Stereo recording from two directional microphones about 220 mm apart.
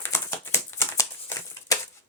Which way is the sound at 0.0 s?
10° left (ahead or behind).